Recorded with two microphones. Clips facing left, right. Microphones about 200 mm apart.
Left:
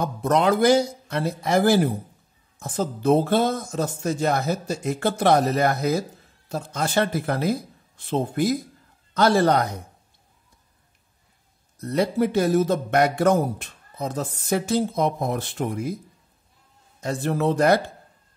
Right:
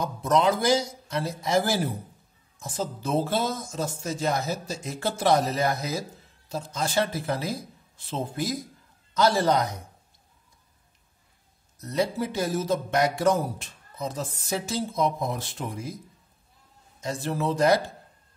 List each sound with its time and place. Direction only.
0.0 s speech: 60° left (ahead or behind)
11.8 s speech: 60° left (ahead or behind)
17.0 s speech: 60° left (ahead or behind)